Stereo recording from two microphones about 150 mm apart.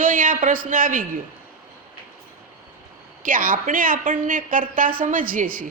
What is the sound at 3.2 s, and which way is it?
A woman's voice, 65° right (ahead or behind).